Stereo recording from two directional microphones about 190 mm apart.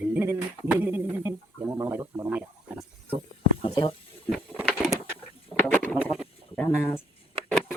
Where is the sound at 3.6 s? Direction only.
25° left (ahead or behind).